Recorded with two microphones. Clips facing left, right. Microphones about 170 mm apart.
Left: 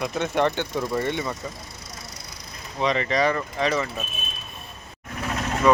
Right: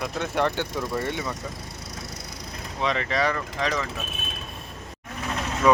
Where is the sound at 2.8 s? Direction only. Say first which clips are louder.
Left 3 dB; centre (ahead or behind).